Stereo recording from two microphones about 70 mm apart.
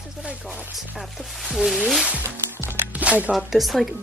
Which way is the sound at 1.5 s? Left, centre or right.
Centre.